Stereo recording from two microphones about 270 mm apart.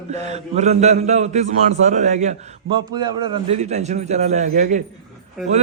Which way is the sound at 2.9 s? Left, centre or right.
Centre.